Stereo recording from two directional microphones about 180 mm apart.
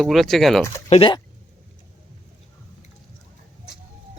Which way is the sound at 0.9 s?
30° left (ahead or behind).